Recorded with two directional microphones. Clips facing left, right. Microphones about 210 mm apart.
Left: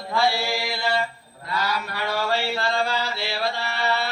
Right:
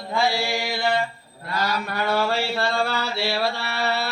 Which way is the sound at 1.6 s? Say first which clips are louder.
Right 3 dB; 45° right (ahead or behind).